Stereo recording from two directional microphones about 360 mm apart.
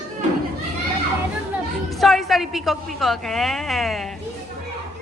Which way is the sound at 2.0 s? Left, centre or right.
Centre.